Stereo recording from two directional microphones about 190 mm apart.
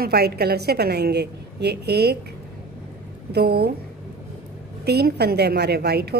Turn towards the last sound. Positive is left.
turn(degrees=-60)  # may be behind; listen again after turning